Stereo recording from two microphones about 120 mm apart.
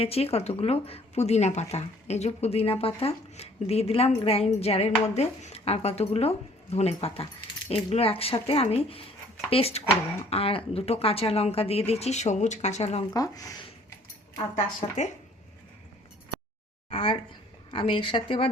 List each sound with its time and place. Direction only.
0.0 s speech: 55° left (ahead or behind)
13.1 s speech: 30° left (ahead or behind)
14.8 s speech: 85° left
16.9 s speech: 45° left (ahead or behind)